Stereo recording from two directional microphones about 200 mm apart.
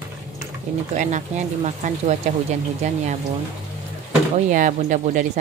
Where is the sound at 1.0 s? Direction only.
35° right (ahead or behind).